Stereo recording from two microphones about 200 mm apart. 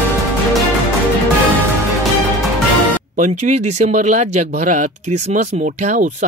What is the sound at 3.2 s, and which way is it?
Speech, 40° right (ahead or behind).